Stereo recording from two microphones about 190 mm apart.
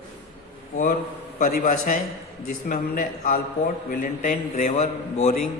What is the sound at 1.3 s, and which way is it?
A man's voice, 45° left (ahead or behind).